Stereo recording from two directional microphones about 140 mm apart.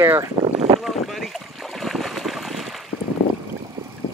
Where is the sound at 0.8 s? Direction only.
Centre (ahead or behind).